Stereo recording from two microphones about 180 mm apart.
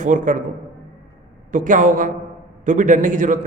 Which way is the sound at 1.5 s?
45° right (ahead or behind).